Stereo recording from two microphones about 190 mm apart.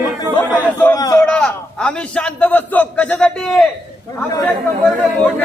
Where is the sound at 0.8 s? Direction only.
15° left (ahead or behind).